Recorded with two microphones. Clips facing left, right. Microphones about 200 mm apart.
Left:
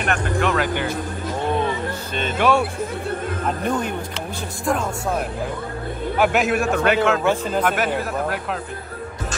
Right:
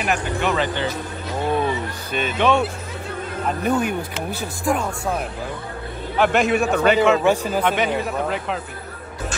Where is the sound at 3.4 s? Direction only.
5° right (ahead or behind).